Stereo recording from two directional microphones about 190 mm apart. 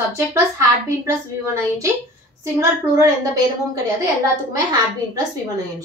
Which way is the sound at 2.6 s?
15° right (ahead or behind).